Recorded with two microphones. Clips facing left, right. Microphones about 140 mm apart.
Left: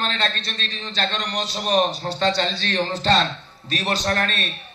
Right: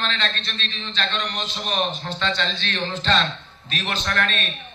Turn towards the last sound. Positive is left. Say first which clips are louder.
# left 2 dB
turn(degrees=40)  # may be behind; listen again after turning